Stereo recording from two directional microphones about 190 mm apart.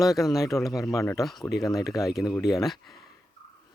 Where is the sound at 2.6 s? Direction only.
Centre (ahead or behind).